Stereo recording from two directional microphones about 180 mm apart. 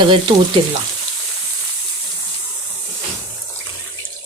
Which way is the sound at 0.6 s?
30° right (ahead or behind).